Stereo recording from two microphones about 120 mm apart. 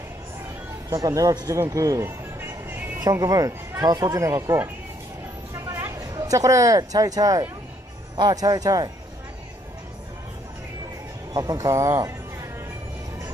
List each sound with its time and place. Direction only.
0.8 s speech: 30° right (ahead or behind)
1.6 s music: 30° right (ahead or behind)
3.0 s speech: 30° right (ahead or behind)
5.5 s a sound: 20° right (ahead or behind)
8.2 s speech: 35° right (ahead or behind)
11.3 s speech: 30° right (ahead or behind)